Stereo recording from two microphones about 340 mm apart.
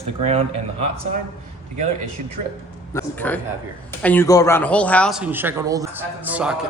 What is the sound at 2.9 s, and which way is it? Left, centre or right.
A man's voice, centre.